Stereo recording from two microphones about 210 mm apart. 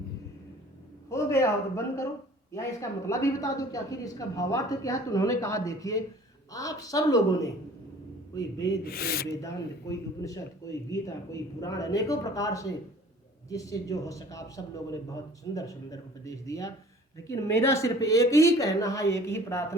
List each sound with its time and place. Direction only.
1.1 s a man's voice: 15° left (ahead or behind)
3.1 s a man's voice: 15° left (ahead or behind)
8.8 s speech: 45° left (ahead or behind)
9.9 s a man's voice: 15° left (ahead or behind)